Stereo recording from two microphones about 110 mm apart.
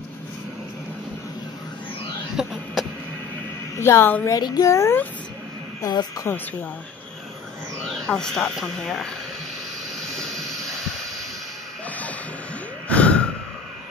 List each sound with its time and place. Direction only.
2.4 s a sound: 5° right (ahead or behind)
3.8 s speech: 20° left (ahead or behind)
4.3 s speech: 35° left (ahead or behind)
5.8 s a woman's voice: 35° left (ahead or behind)
7.8 s speech: 5° left (ahead or behind)
10.1 s jet engine: 5° left (ahead or behind)
12.8 s gasp: 10° left (ahead or behind)